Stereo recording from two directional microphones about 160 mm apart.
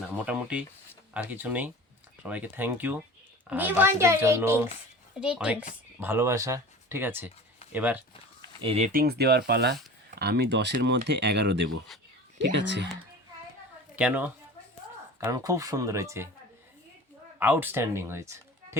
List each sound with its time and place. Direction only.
0.3 s a sound: 5° right (ahead or behind)
1.1 s speech: 10° right (ahead or behind)
8.6 s speech: 40° right (ahead or behind)
8.9 s speech: 75° right (ahead or behind); by 12.9 s 90° right
13.9 s a woman's voice: 10° right (ahead or behind)
15.2 s speech: 20° right (ahead or behind)
17.4 s speech: 10° right (ahead or behind)